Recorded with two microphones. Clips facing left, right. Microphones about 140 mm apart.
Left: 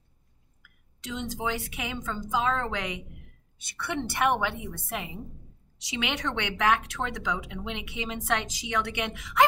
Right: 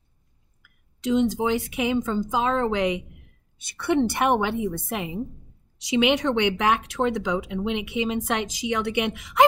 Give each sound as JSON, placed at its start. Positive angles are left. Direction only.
{"t": 0.6, "sound": "a woman's voice", "side_deg": -20}